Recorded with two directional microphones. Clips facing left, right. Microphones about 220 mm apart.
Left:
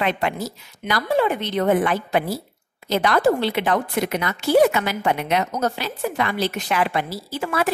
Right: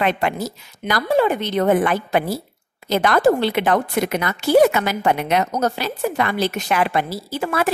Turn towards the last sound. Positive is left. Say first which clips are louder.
# right 2 dB
turn(degrees=-50)  # may be behind; listen again after turning